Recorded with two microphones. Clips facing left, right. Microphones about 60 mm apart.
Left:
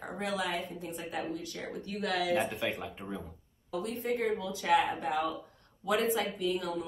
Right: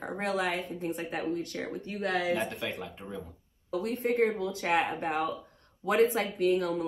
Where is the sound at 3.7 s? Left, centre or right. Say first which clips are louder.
Right 4 dB; right.